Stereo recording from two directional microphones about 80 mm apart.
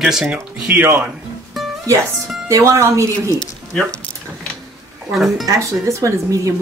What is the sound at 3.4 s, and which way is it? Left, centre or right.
Speech, centre.